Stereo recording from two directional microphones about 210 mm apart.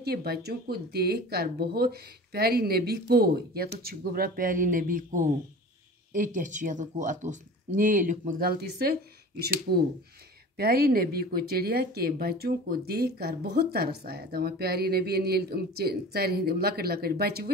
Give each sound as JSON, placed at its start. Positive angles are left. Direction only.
{"t": 0.0, "sound": "speech", "side_deg": -50}